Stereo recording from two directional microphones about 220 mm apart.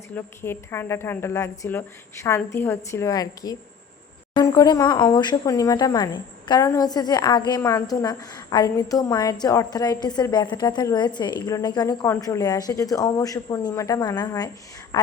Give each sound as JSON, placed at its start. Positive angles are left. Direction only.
{"t": 0.2, "sound": "a woman's voice", "side_deg": 10}